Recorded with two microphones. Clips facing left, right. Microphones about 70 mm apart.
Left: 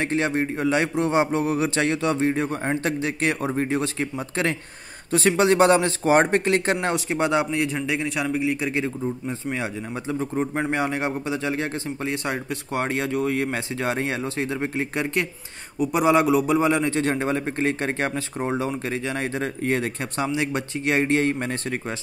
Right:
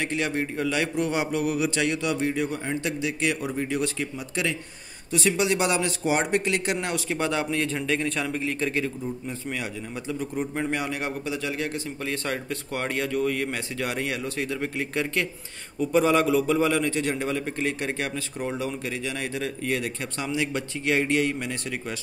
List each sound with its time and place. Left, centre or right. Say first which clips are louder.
0.0 s a man's voice: left 4 dB; left; by 8.8 s centre
8.8 s a man's voice: left 4 dB; left
15.8 s a man's voice: left 2 dB; centre; by 21.9 s left